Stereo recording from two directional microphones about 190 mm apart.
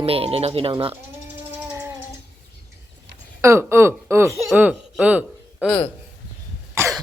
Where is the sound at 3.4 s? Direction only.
15° right (ahead or behind).